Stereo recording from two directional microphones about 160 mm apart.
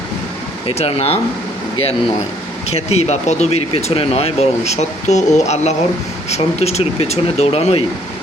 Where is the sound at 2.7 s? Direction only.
40° left (ahead or behind).